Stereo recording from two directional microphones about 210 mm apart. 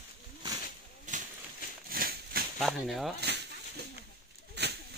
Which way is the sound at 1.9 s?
45° right (ahead or behind).